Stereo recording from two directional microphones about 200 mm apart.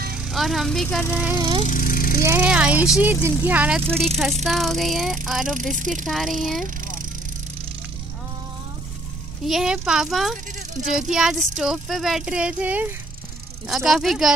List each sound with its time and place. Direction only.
0.2 s a woman's voice: centre (ahead or behind)
1.6 s lawn mower: 40° left (ahead or behind)
2.2 s speech: 5° right (ahead or behind)
3.8 s speech: 30° right (ahead or behind)
4.5 s child singing: centre (ahead or behind)
5.5 s speech: 40° right (ahead or behind)
6.0 s child singing: centre (ahead or behind)
6.6 s vehicle: 40° right (ahead or behind)
9.4 s child singing: centre (ahead or behind)
10.5 s speech: 40° right (ahead or behind)
10.9 s child singing: centre (ahead or behind)